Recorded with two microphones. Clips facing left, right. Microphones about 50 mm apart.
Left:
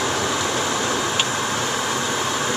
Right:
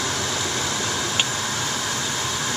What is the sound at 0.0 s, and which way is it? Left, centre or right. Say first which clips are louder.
Vehicle: left 4 dB; centre.